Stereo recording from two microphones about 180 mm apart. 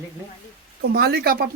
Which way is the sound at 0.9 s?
60° right (ahead or behind).